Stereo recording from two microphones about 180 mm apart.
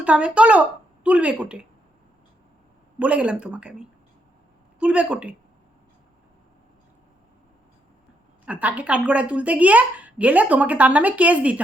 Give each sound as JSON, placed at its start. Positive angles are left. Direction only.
{"t": 0.0, "sound": "speech", "side_deg": -5}
{"t": 3.0, "sound": "speech", "side_deg": -5}
{"t": 8.4, "sound": "speech", "side_deg": -10}